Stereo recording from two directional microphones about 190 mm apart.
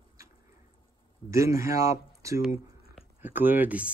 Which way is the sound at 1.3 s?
15° right (ahead or behind).